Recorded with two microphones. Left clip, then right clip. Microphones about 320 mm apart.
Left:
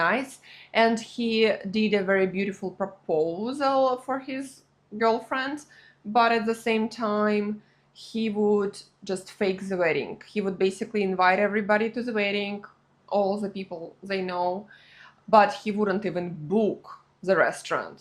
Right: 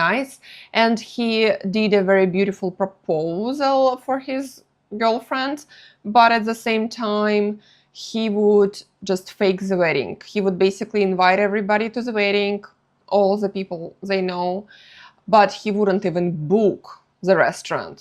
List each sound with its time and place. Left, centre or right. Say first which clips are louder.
0.0 s speech: right 5 dB; right